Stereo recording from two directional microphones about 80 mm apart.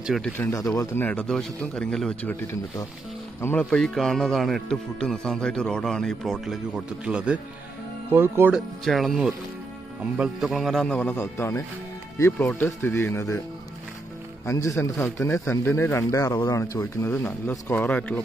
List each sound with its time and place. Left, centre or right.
0.5 s speech: left
0.9 s speech: left
1.2 s a man's voice: centre
3.7 s speech: centre
7.1 s speech: centre
8.1 s speech: right
8.8 s speech: centre
10.4 s speech: centre
10.9 s speech: left
11.1 s speech: left
12.9 s speech: left
14.4 s speech: left
17.8 s a man's voice: centre